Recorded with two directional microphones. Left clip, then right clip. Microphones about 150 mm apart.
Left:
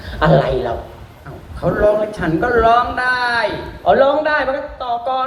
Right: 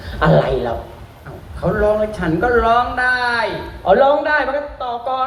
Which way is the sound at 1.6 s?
40° left (ahead or behind).